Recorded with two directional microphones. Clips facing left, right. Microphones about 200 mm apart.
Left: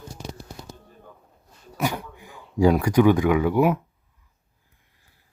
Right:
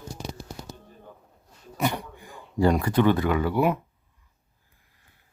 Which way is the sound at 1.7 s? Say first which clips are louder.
Even; 5° left (ahead or behind).